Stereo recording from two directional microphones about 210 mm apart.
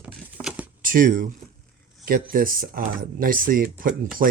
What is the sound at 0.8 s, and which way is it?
Speech, 40° right (ahead or behind).